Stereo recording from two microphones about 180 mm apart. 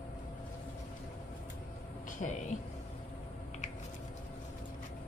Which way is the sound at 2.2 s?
45° left (ahead or behind).